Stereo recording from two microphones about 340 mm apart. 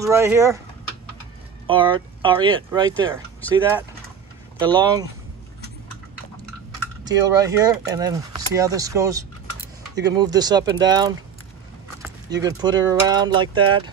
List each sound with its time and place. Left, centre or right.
0.0 s speech: centre
1.7 s speech: centre
2.9 s speech: centre
4.6 s speech: centre
7.1 s speech: centre
12.3 s speech: centre